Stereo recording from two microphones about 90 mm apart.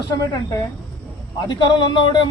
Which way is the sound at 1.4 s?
60° left (ahead or behind).